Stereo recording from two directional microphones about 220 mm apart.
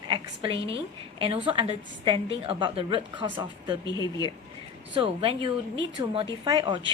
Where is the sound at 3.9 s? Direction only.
20° left (ahead or behind).